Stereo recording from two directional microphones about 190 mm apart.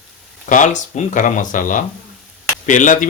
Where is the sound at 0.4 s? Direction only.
40° left (ahead or behind).